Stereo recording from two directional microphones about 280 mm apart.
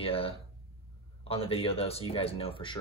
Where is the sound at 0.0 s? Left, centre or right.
Centre.